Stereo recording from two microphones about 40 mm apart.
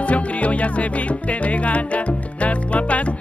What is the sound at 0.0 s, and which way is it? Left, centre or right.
Music, left.